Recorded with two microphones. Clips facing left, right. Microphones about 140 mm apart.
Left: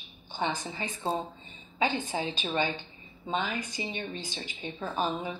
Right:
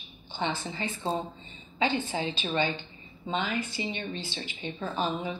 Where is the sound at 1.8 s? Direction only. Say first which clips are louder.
Right 1 dB; 20° left (ahead or behind).